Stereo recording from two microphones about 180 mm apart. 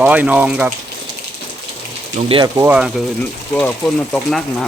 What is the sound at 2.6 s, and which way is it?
Speech, 5° right (ahead or behind).